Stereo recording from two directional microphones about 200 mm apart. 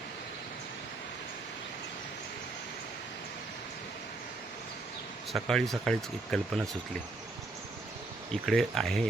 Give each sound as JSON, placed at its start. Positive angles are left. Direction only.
{"t": 5.3, "sound": "speech", "side_deg": 0}
{"t": 8.3, "sound": "speech", "side_deg": 0}